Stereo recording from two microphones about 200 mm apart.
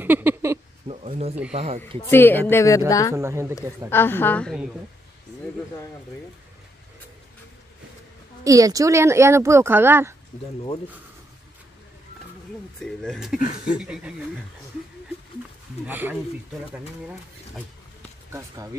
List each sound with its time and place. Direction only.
0.0 s a sound: 10° right (ahead or behind)
0.8 s a sound: 30° right (ahead or behind)
1.5 s speech: 30° right (ahead or behind)
2.0 s a woman's voice: 10° left (ahead or behind)
3.2 s speech: 15° right (ahead or behind)
3.9 s a woman's voice: 10° left (ahead or behind)
8.5 s speech: 15° right (ahead or behind)
12.8 s speech: 5° left (ahead or behind)
15.9 s speech: 10° right (ahead or behind)